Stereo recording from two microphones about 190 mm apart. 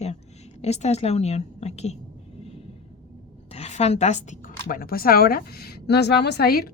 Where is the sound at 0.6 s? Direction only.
35° left (ahead or behind).